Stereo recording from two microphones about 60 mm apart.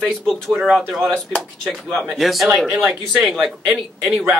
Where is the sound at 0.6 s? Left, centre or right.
Centre.